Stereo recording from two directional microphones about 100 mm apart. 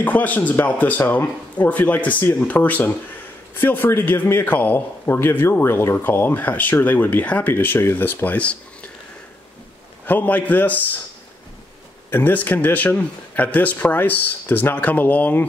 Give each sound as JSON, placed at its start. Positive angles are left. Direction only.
{"t": 0.0, "sound": "a man's voice", "side_deg": 15}
{"t": 10.0, "sound": "speech", "side_deg": 15}
{"t": 12.1, "sound": "speech", "side_deg": 15}